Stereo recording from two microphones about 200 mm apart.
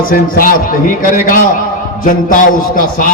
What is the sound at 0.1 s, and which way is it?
A man's voice, 45° left (ahead or behind).